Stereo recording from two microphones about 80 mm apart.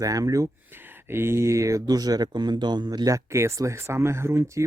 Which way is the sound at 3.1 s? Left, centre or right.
Right.